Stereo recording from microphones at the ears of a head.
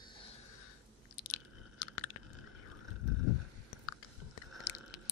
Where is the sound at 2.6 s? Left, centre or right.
Left.